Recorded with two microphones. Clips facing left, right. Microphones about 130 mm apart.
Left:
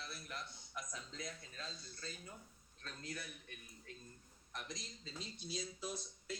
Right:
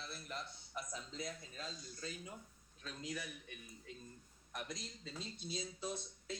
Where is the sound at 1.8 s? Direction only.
15° right (ahead or behind).